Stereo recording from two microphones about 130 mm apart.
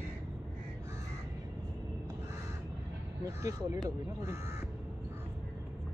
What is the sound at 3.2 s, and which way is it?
Speech, 25° right (ahead or behind).